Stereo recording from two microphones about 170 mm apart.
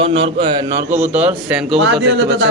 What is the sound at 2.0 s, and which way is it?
Speech, 90° right.